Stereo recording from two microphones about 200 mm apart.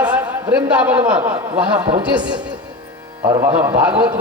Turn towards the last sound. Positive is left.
turn(degrees=-10)  # may be behind; listen again after turning